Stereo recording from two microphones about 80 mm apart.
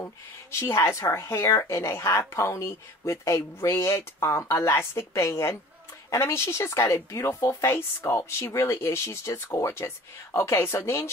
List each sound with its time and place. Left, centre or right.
0.0 s a woman's voice: left